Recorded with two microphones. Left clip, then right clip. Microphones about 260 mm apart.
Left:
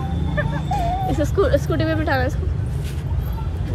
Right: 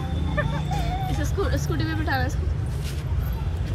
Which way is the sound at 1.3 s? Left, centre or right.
Centre.